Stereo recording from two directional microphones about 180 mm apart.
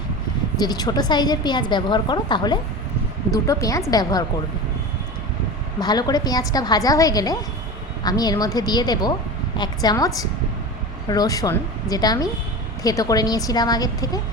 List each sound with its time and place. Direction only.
0.6 s a woman's voice: 20° left (ahead or behind)
5.8 s a woman's voice: 20° left (ahead or behind)